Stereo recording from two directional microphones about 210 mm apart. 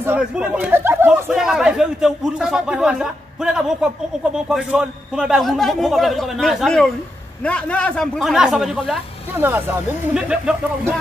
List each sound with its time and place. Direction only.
0.0 s speech: 5° right (ahead or behind)